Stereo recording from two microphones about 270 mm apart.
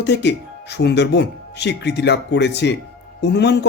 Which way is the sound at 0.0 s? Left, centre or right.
Left.